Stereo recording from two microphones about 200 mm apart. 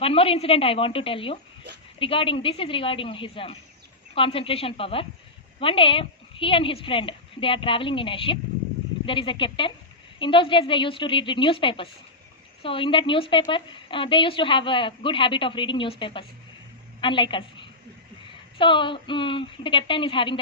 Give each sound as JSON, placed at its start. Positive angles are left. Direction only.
{"t": 0.0, "sound": "a woman's voice", "side_deg": 30}